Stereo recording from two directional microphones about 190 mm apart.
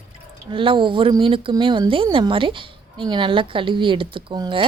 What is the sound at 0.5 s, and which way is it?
A woman's voice, 25° right (ahead or behind).